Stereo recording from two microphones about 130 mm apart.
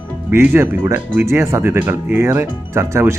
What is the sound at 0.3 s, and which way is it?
Speech, 15° right (ahead or behind).